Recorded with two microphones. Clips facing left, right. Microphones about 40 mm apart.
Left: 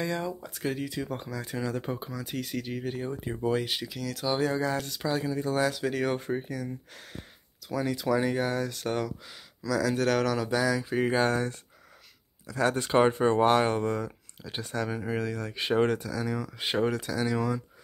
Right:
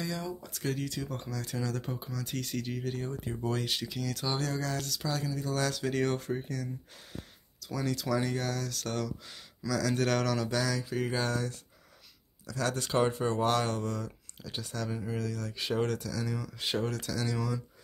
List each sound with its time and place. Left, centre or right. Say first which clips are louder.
0.0 s speech: left 5 dB; left
2.2 s speech: left 1 dB; centre
3.9 s speech: left 3 dB; centre
4.4 s speech: left 6 dB; centre
5.6 s speech: left 1 dB; centre
6.1 s speech: left 3 dB; left
9.2 s speech: left 1 dB; centre
10.9 s speech: left 6 dB; left